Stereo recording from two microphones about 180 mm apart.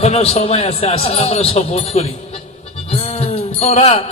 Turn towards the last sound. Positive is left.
turn(degrees=35)  # may be behind; listen again after turning